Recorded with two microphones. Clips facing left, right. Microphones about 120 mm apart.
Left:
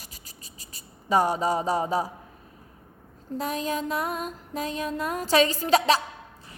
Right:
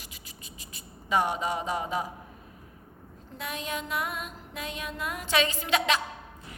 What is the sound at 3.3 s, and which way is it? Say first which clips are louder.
Speech: left 7 dB; 35° left (ahead or behind).